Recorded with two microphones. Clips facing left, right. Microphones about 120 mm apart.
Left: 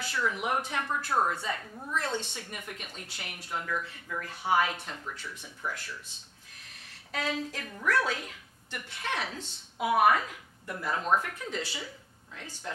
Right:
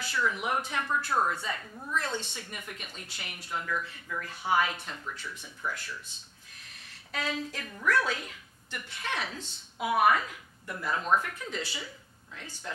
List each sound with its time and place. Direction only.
0.0 s a sound: 40° left (ahead or behind)
0.4 s speech: 45° left (ahead or behind)
1.7 s a woman's voice: 25° left (ahead or behind)
2.4 s speech: 40° left (ahead or behind)
7.1 s speech: 50° left (ahead or behind)
11.6 s speech: 55° left (ahead or behind)
12.4 s speech: 40° left (ahead or behind)